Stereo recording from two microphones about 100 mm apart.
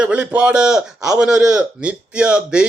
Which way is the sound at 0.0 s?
10° right (ahead or behind).